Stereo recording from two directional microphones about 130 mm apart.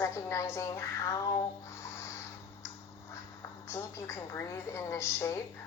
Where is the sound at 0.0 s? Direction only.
20° left (ahead or behind).